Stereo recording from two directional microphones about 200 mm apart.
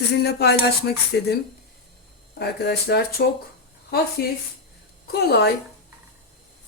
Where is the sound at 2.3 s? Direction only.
55° left (ahead or behind).